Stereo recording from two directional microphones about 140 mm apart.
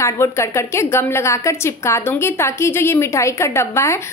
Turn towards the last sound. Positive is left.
turn(degrees=20)  # may be behind; listen again after turning